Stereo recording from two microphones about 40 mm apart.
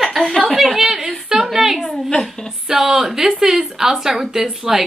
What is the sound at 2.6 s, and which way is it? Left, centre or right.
A woman's voice, centre.